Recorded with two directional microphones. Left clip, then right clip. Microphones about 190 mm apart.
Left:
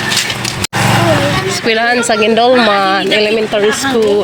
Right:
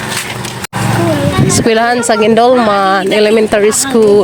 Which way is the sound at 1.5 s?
35° right (ahead or behind).